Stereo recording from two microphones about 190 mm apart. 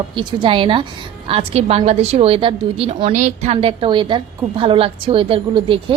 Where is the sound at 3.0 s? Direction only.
40° right (ahead or behind).